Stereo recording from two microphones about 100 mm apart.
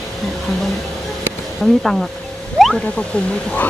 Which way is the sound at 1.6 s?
Centre (ahead or behind).